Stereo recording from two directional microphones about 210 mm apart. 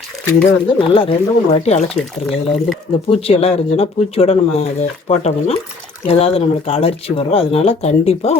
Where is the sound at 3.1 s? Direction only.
30° left (ahead or behind).